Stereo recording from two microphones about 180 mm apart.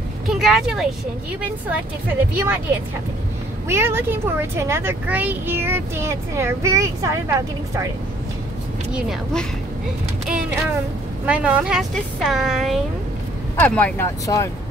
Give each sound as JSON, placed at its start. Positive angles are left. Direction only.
{"t": 0.3, "sound": "speech", "side_deg": 0}
{"t": 3.6, "sound": "speech", "side_deg": -15}
{"t": 8.9, "sound": "a woman's voice", "side_deg": 5}
{"t": 11.2, "sound": "a woman's voice", "side_deg": -5}
{"t": 14.2, "sound": "speech", "side_deg": 20}